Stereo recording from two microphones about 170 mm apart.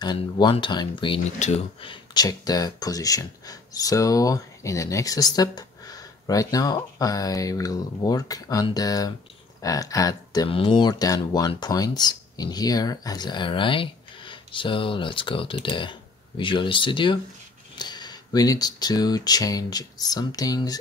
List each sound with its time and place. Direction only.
0.0 s speech: 25° left (ahead or behind)